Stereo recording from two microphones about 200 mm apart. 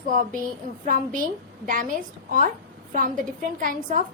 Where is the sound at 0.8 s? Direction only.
45° right (ahead or behind).